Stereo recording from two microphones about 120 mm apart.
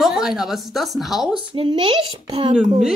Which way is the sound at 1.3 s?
45° right (ahead or behind).